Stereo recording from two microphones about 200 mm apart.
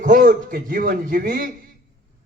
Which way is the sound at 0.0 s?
45° right (ahead or behind).